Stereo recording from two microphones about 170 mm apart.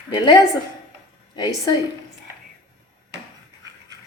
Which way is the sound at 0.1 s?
25° left (ahead or behind).